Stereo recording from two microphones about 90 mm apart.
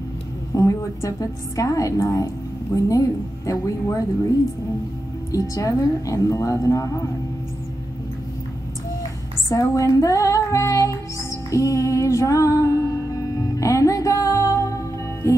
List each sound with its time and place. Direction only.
0.6 s a woman's voice: 40° left (ahead or behind)
5.3 s a woman's voice: 40° left (ahead or behind)
9.5 s a woman's voice: 40° left (ahead or behind)
11.5 s music: 35° left (ahead or behind)
15.2 s a woman's voice: 35° left (ahead or behind)